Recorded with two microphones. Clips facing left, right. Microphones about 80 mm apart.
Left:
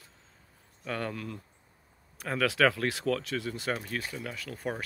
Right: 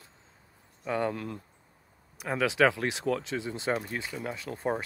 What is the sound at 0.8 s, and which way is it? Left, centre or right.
Speech, centre.